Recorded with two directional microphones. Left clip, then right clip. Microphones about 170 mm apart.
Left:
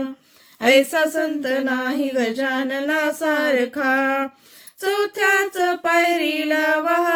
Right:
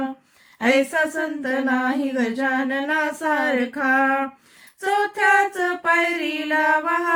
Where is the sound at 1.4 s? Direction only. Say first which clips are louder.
Left 1 dB; 35° left (ahead or behind).